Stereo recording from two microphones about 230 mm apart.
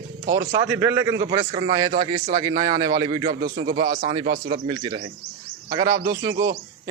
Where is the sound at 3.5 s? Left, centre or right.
Right.